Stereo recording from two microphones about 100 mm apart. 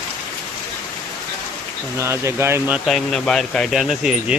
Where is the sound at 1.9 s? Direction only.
25° right (ahead or behind).